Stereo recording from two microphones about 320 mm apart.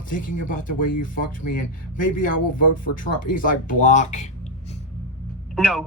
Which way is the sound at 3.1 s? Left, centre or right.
Left.